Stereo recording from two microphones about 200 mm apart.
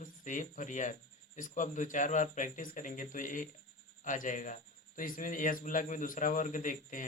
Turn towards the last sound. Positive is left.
turn(degrees=40)  # may be behind; listen again after turning